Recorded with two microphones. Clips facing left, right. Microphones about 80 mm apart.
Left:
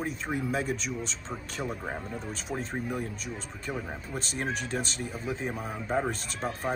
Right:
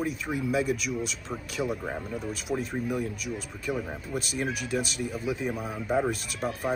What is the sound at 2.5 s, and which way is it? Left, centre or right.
Speech, left.